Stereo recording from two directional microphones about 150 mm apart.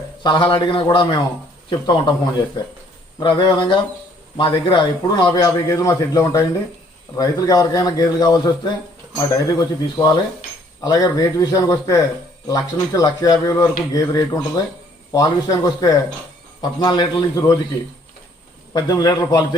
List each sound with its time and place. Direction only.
0.2 s a man's voice: 30° left (ahead or behind)
18.7 s a man's voice: 25° left (ahead or behind)